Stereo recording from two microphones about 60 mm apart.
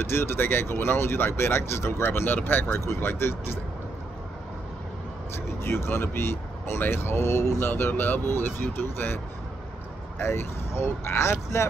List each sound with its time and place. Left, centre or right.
0.0 s speech: left
2.0 s speech: left
2.8 s speech: left
5.3 s speech: left
7.7 s speech: left